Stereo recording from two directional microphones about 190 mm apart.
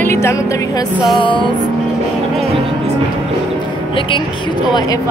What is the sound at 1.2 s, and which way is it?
Music, 25° left (ahead or behind).